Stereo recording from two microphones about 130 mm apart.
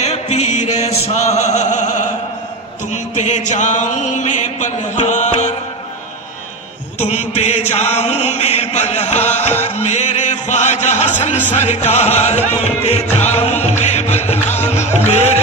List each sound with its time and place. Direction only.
0.0 s chant: 55° left (ahead or behind)
2.9 s music: 65° left (ahead or behind)
7.0 s chant: 55° left (ahead or behind)
9.7 s music: 60° left (ahead or behind)